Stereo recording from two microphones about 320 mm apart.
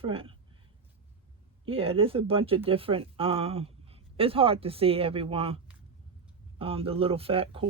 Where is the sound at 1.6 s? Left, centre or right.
Centre.